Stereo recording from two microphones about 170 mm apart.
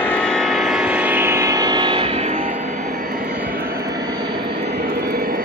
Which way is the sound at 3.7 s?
20° right (ahead or behind).